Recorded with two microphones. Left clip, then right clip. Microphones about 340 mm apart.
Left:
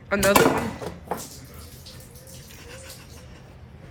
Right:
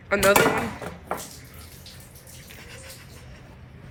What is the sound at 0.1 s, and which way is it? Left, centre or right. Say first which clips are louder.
Speech: even; centre.